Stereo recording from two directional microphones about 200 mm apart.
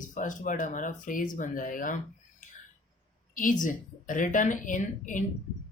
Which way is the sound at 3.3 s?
40° left (ahead or behind).